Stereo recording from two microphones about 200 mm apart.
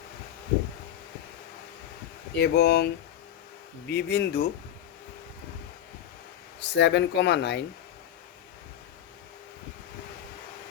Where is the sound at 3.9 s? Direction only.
55° left (ahead or behind).